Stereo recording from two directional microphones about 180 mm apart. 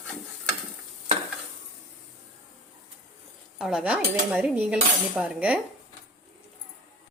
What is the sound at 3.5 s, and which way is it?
A woman's voice, 5° right (ahead or behind).